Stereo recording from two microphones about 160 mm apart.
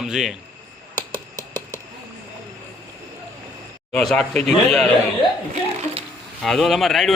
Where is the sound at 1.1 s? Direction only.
25° right (ahead or behind).